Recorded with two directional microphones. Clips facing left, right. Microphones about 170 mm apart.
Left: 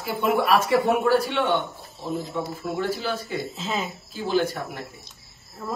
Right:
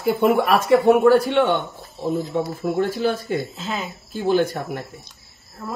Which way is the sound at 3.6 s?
Centre (ahead or behind).